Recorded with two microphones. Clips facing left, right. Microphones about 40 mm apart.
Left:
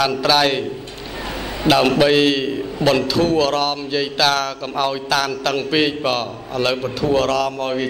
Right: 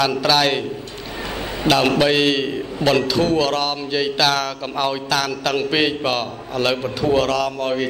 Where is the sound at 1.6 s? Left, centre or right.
Left.